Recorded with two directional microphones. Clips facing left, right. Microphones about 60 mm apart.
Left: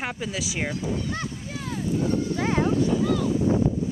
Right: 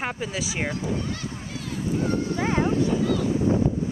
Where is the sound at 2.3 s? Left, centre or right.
Centre.